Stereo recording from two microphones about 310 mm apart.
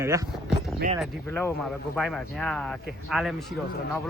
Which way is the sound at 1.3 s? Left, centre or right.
Centre.